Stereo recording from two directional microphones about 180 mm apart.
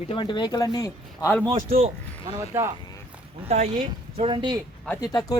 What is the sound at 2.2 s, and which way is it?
Speech, 15° right (ahead or behind).